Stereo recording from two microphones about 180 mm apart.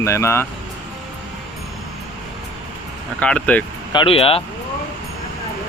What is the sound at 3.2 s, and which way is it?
Speech, 5° left (ahead or behind).